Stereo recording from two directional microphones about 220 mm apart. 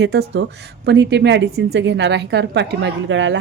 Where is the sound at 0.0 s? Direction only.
50° right (ahead or behind).